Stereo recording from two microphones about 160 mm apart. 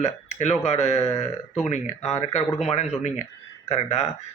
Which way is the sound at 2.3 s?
45° left (ahead or behind).